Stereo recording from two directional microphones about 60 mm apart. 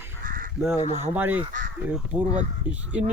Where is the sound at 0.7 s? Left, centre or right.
Right.